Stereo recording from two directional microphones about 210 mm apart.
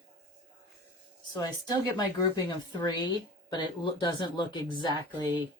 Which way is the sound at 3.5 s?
20° left (ahead or behind).